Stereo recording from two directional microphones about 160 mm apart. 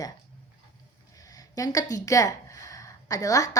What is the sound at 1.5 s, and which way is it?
A woman's voice, 20° left (ahead or behind).